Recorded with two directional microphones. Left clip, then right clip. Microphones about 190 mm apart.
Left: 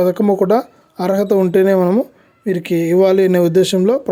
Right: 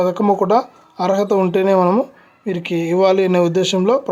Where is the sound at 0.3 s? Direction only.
35° left (ahead or behind).